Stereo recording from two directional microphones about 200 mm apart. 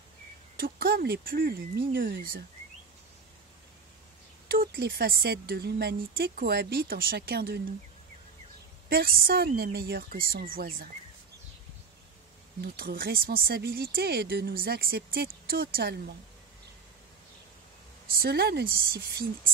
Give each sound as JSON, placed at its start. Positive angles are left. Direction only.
{"t": 0.6, "sound": "speech", "side_deg": -50}
{"t": 4.5, "sound": "speech", "side_deg": -50}
{"t": 8.8, "sound": "speech", "side_deg": -50}
{"t": 12.6, "sound": "speech", "side_deg": -45}
{"t": 18.2, "sound": "speech", "side_deg": -55}